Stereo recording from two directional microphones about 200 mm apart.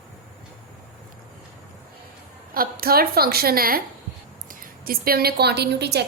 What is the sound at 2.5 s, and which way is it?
A woman's voice, 45° right (ahead or behind).